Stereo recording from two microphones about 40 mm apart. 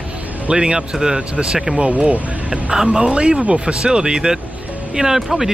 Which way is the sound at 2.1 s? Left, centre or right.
Right.